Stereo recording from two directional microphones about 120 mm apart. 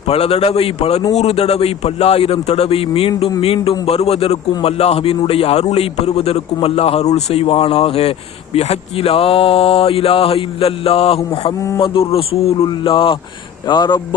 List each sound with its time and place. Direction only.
0.1 s a man's voice: 60° left (ahead or behind); by 14.2 s 40° left (ahead or behind)